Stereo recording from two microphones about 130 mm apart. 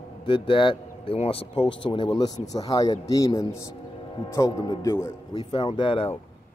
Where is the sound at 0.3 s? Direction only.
40° left (ahead or behind).